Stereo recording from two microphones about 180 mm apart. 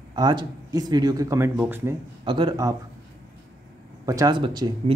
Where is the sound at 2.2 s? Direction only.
25° right (ahead or behind).